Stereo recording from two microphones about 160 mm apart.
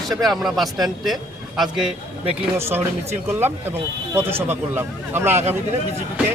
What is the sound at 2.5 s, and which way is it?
A man's voice, 15° right (ahead or behind).